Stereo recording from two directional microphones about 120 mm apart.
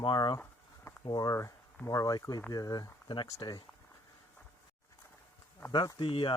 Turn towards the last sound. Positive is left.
turn(degrees=45)  # may be behind; listen again after turning